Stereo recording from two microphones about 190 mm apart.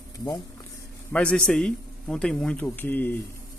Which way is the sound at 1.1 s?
5° left (ahead or behind).